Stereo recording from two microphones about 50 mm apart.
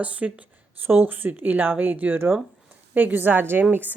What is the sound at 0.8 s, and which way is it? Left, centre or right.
Speech, right.